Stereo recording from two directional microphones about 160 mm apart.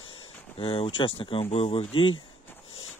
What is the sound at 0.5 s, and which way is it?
Speech, 35° left (ahead or behind).